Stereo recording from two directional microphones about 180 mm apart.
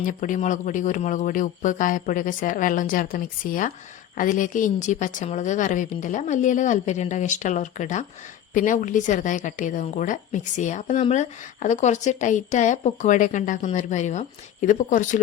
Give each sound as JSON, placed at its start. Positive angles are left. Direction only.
{"t": 0.0, "sound": "a woman's voice", "side_deg": 45}